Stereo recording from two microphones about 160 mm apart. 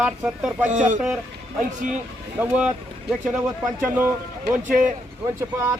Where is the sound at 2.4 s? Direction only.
5° right (ahead or behind).